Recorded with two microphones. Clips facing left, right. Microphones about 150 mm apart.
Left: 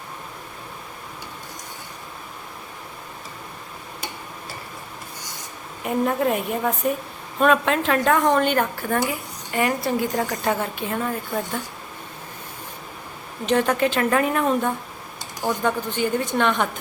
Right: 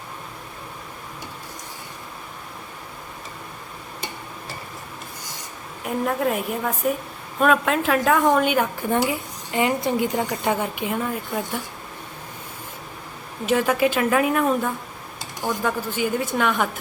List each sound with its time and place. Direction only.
5.8 s speech: centre (ahead or behind)
9.0 s a woman's voice: 20° right (ahead or behind)
13.4 s speech: 5° right (ahead or behind)